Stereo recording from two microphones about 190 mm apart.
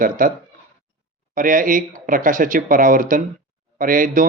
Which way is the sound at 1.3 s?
45° right (ahead or behind).